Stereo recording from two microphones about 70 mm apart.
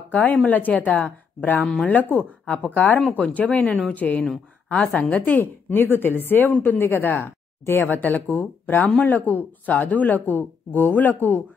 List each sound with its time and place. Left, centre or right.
0.1 s speech: left
1.6 s speech: centre
2.1 s speech: left